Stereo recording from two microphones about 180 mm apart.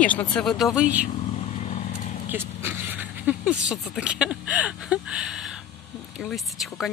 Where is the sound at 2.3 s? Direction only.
10° right (ahead or behind).